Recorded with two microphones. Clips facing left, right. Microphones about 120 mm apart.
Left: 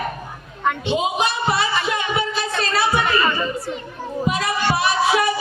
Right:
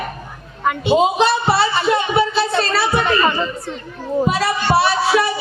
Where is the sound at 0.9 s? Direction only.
30° right (ahead or behind).